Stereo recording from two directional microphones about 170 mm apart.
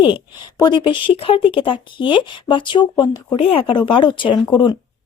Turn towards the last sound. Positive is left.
turn(degrees=25)  # may be behind; listen again after turning